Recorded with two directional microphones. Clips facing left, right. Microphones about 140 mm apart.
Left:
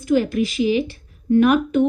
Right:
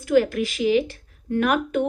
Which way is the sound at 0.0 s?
20° left (ahead or behind).